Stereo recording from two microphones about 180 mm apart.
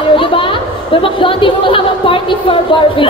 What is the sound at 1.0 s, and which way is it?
Speech, 30° left (ahead or behind).